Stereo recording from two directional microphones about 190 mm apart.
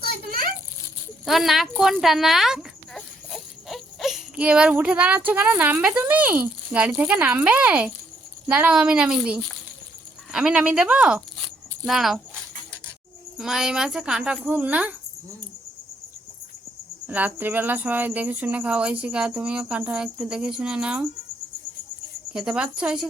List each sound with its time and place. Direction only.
0.3 s a sound: 50° right (ahead or behind)
1.2 s a woman's voice: centre (ahead or behind)
13.3 s a woman's voice: centre (ahead or behind)
17.1 s speech: 10° right (ahead or behind)
22.3 s a woman's voice: 5° right (ahead or behind)